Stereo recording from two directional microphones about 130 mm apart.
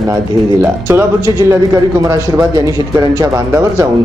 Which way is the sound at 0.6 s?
20° right (ahead or behind).